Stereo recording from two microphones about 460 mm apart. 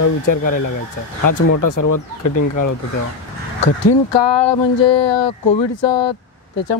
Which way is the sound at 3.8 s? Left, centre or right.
Left.